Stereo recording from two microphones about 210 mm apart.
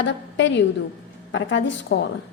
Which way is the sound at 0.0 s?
60° left (ahead or behind).